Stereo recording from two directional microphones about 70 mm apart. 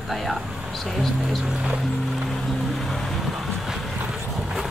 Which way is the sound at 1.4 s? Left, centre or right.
Centre.